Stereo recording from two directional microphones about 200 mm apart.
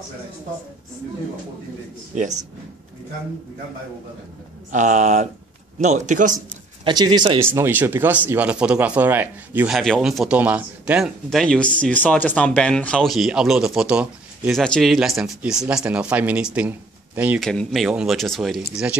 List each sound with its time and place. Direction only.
4.7 s speech: 35° right (ahead or behind)
6.8 s speech: 20° right (ahead or behind)
9.8 s speech: centre (ahead or behind)
17.4 s speech: centre (ahead or behind)